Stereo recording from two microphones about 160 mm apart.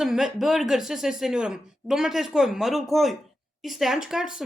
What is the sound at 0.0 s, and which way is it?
Speech, centre (ahead or behind).